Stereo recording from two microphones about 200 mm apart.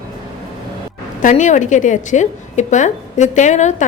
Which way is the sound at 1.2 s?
35° left (ahead or behind).